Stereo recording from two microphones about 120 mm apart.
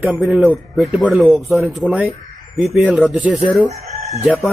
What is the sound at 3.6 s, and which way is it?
Chicken, 60° right (ahead or behind).